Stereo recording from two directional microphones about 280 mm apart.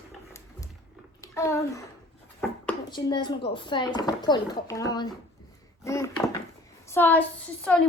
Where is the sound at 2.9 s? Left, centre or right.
Centre.